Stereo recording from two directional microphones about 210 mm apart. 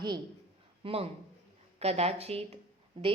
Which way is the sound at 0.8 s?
25° right (ahead or behind).